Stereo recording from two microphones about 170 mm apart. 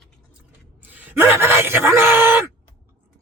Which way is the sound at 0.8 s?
10° right (ahead or behind).